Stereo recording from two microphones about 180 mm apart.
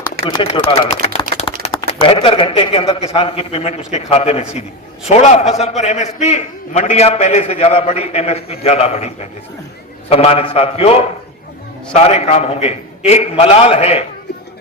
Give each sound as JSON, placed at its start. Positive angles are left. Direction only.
{"t": 0.3, "sound": "a man's voice", "side_deg": 25}